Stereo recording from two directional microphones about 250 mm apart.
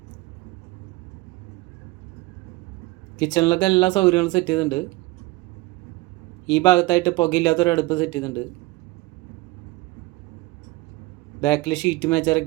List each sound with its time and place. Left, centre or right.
3.2 s speech: centre
6.6 s speech: centre
11.3 s speech: centre